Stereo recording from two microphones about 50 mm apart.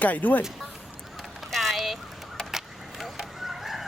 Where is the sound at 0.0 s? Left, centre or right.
Left.